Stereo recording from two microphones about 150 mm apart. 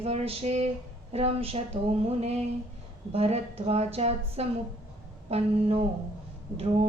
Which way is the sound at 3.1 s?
45° right (ahead or behind).